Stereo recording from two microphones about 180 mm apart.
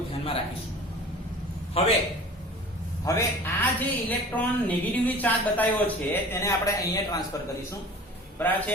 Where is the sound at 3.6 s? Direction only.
10° left (ahead or behind).